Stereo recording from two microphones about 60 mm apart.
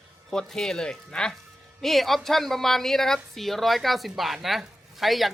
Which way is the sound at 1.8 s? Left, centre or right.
Centre.